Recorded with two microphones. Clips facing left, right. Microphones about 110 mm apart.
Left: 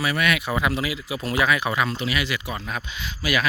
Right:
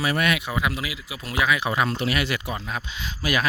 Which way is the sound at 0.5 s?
10° right (ahead or behind).